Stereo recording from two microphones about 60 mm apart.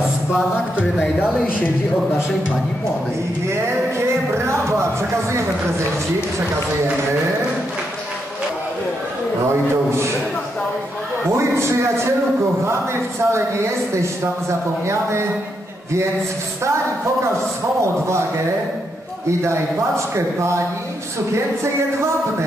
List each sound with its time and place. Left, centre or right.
4.4 s speech: right
9.8 s speech: right
11.2 s speech: right
13.2 s speech: right
17.7 s speech: right
20.2 s speech: right